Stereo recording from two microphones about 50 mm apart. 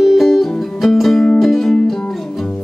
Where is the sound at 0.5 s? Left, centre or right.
Centre.